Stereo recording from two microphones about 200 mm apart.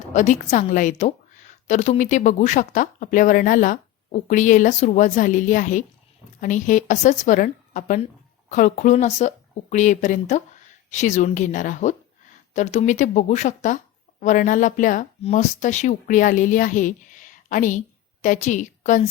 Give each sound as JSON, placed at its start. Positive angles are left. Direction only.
{"t": 0.1, "sound": "a woman's voice", "side_deg": 35}